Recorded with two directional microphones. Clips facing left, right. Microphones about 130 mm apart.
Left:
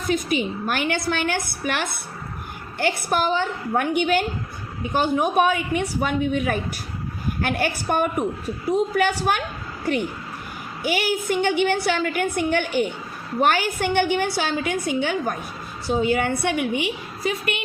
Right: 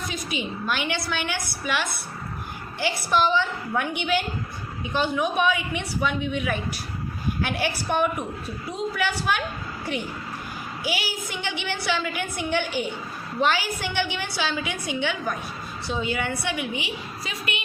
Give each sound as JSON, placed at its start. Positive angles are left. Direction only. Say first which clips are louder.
{"t": 0.1, "sound": "a woman's voice", "louder": "left 13 dB", "side_deg": 50}
{"t": 10.8, "sound": "a woman's voice", "louder": "left 8 dB", "side_deg": 55}